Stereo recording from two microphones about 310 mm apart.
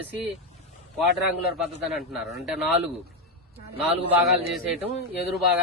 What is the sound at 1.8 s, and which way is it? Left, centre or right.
Speech, centre.